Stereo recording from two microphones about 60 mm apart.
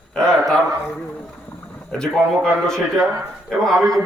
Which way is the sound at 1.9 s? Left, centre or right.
Centre.